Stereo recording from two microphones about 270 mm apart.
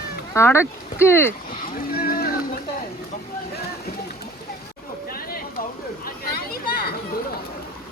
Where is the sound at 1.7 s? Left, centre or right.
Left.